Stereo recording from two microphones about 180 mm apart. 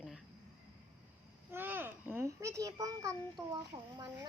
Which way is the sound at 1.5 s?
10° right (ahead or behind).